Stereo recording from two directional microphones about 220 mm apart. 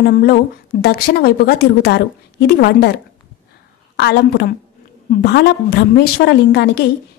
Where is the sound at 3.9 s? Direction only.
50° left (ahead or behind).